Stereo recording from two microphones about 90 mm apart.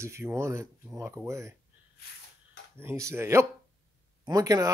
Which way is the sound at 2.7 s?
30° right (ahead or behind).